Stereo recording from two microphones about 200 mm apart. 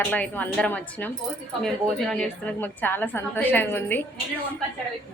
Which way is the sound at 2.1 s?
5° left (ahead or behind).